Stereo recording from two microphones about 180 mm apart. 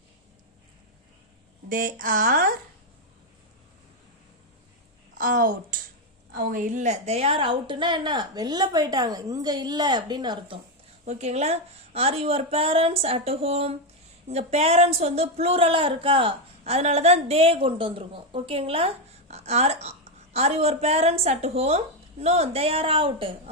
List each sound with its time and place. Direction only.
1.7 s speech: 50° right (ahead or behind)
5.1 s a woman's voice: 50° right (ahead or behind); by 10.6 s 25° right (ahead or behind)
11.0 s speech: 35° right (ahead or behind)